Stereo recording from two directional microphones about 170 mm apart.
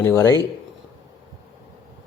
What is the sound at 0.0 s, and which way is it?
Speech, 15° left (ahead or behind).